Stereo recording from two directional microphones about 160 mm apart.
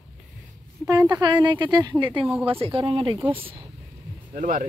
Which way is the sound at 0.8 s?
20° right (ahead or behind).